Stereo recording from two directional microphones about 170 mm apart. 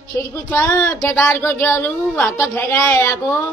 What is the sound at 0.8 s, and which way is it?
A woman's voice, 20° left (ahead or behind).